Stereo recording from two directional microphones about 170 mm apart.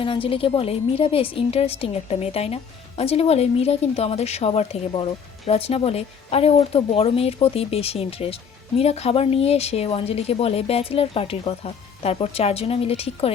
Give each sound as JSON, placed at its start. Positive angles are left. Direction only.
{"t": 0.0, "sound": "speech", "side_deg": 30}